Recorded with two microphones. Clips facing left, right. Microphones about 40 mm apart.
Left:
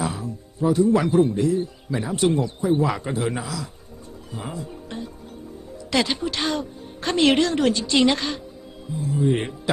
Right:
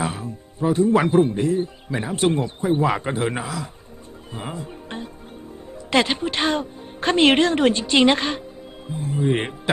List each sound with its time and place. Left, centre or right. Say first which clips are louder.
0.0 s a man's voice: right 1 dB; right